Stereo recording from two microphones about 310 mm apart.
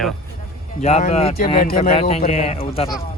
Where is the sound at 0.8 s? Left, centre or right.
Left.